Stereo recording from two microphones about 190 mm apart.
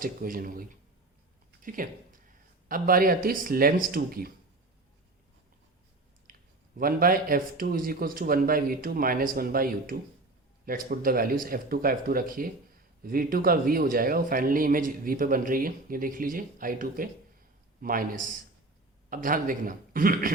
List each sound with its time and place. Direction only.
0.0 s speech: 50° right (ahead or behind)
1.6 s speech: 45° right (ahead or behind)
6.3 s a sound: 45° right (ahead or behind)
6.7 s speech: 50° right (ahead or behind)